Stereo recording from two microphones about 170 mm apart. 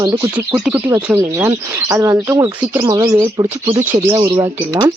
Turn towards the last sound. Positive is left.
turn(degrees=-20)  # may be behind; listen again after turning